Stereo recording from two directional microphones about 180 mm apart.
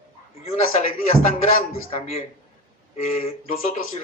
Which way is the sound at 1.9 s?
35° left (ahead or behind).